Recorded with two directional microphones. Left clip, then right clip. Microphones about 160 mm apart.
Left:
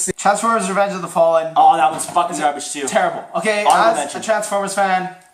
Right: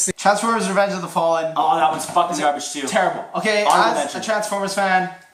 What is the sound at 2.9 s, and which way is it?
Speech, centre (ahead or behind).